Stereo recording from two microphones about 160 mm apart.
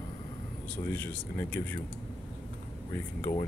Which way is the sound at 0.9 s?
10° left (ahead or behind).